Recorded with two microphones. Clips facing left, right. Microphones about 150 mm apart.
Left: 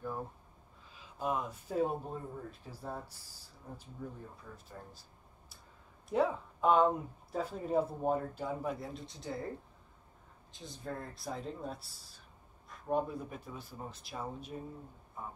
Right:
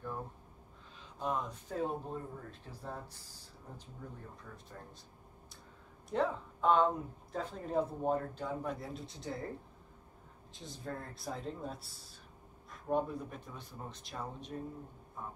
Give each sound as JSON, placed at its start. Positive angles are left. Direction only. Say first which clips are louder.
{"t": 0.9, "sound": "speech", "louder": "left 1 dB", "side_deg": 5}
{"t": 4.0, "sound": "speech", "louder": "left 4 dB", "side_deg": 10}
{"t": 6.0, "sound": "speech", "louder": "left 2 dB", "side_deg": 10}
{"t": 10.5, "sound": "speech", "louder": "left 1 dB", "side_deg": 0}